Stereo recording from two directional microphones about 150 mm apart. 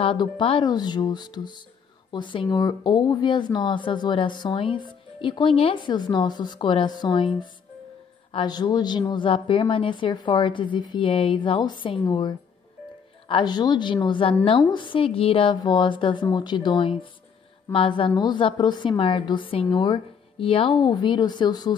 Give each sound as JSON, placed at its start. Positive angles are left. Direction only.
{"t": 0.0, "sound": "a woman's voice", "side_deg": 35}